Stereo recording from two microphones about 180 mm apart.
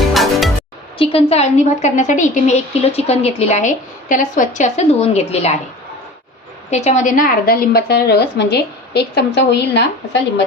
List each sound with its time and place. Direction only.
0.0 s music: centre (ahead or behind)
0.9 s a woman's voice: 30° left (ahead or behind)
6.7 s a woman's voice: 40° left (ahead or behind); by 10.4 s 70° left (ahead or behind)